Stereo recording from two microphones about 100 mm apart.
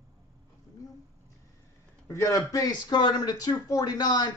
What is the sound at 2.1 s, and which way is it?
A man's voice, 30° left (ahead or behind).